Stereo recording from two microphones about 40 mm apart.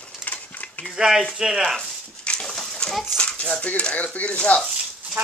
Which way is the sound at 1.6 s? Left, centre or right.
Centre.